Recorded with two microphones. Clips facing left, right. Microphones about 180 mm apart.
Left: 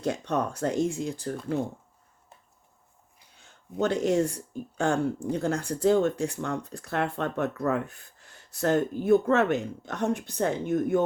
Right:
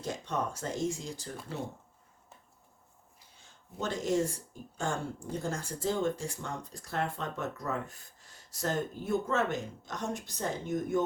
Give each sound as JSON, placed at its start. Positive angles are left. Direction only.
{"t": 0.0, "sound": "speech", "side_deg": 65}
{"t": 3.3, "sound": "speech", "side_deg": 65}